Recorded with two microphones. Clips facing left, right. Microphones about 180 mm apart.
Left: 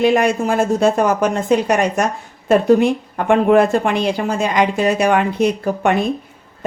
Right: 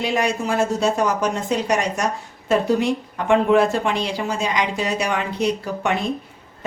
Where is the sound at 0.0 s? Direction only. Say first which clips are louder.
Left 7 dB; 55° left (ahead or behind).